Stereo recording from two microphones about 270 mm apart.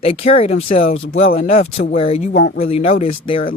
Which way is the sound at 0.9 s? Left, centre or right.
Left.